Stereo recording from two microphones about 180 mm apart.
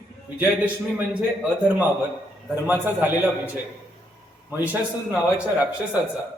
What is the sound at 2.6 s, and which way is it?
Speech, 10° right (ahead or behind).